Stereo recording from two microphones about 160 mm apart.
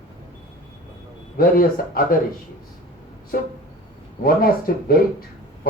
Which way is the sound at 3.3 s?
60° left (ahead or behind).